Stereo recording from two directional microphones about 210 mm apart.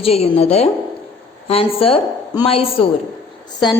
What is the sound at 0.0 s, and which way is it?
Speech, 30° left (ahead or behind).